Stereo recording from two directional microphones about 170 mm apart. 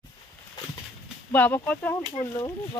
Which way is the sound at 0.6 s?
25° left (ahead or behind).